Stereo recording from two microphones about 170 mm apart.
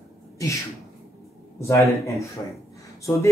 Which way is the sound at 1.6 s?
15° left (ahead or behind).